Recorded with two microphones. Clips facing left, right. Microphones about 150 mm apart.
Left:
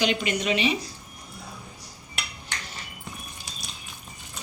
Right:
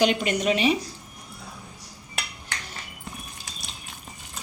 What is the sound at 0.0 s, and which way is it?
Speech, 45° right (ahead or behind).